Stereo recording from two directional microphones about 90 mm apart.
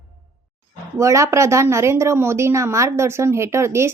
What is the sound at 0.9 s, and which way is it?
A woman's voice, 35° right (ahead or behind).